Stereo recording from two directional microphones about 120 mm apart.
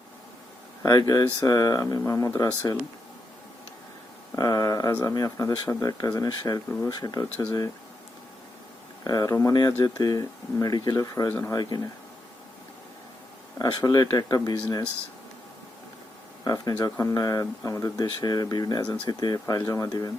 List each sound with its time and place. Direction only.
0.9 s speech: 30° left (ahead or behind)
4.4 s a sound: 30° left (ahead or behind)
5.0 s speech: 30° left (ahead or behind)
9.0 s speech: 30° left (ahead or behind)
11.5 s speech: 35° left (ahead or behind)
13.6 s speech: 35° left (ahead or behind)
16.4 s speech: 30° left (ahead or behind)